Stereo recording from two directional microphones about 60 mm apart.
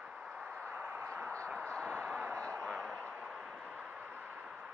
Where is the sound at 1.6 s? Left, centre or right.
Centre.